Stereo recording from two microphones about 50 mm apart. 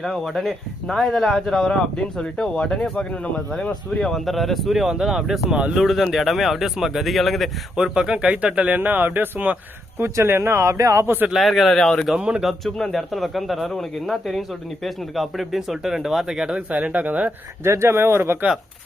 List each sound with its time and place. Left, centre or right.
0.0 s speech: centre
2.0 s speech: left
4.3 s speech: centre
7.8 s speech: centre; by 9.6 s right
10.0 s speech: right
11.0 s a man's voice: right
11.3 s speech: centre
12.1 s speech: right
12.4 s speech: centre
16.5 s speech: right
17.6 s speech: right